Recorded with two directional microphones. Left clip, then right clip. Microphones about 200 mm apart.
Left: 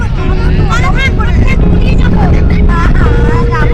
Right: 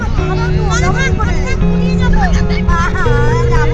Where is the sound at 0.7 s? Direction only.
35° left (ahead or behind).